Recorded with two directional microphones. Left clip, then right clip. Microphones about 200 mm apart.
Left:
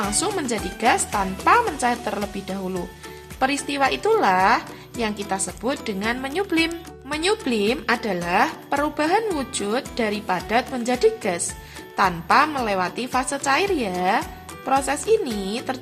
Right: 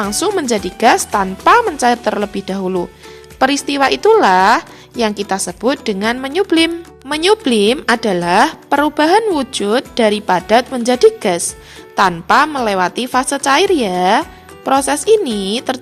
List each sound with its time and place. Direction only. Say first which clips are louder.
0.0 s a woman's voice: right 7 dB; 40° right (ahead or behind)